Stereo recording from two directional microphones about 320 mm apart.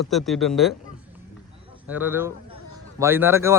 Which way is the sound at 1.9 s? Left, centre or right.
Centre.